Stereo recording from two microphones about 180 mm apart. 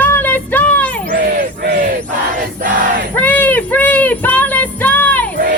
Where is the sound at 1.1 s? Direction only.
50° right (ahead or behind).